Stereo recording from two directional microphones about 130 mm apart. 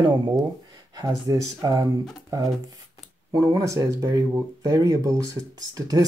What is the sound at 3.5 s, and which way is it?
Speech, 25° right (ahead or behind).